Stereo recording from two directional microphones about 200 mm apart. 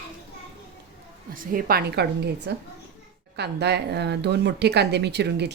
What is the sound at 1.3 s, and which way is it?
A woman's voice, 45° right (ahead or behind).